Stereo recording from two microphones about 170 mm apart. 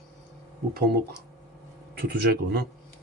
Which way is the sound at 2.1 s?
65° right (ahead or behind).